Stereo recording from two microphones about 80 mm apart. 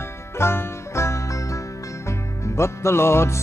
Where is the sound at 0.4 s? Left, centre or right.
Left.